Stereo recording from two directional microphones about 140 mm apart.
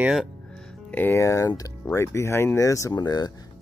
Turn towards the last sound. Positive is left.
turn(degrees=30)  # may be behind; listen again after turning